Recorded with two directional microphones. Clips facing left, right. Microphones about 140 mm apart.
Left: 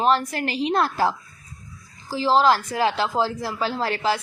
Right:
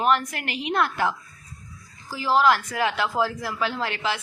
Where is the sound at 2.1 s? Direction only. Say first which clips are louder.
Left 2 dB; 30° left (ahead or behind).